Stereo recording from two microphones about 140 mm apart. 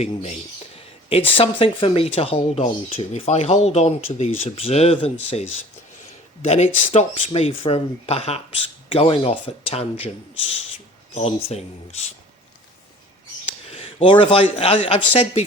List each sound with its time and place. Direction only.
0.0 s speech: 50° left (ahead or behind)
6.4 s speech: 50° left (ahead or behind)
11.1 s speech: 45° left (ahead or behind)
13.7 s speech: 45° left (ahead or behind)